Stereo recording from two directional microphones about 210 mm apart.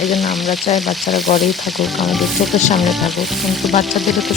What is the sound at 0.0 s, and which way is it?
Frying, centre (ahead or behind).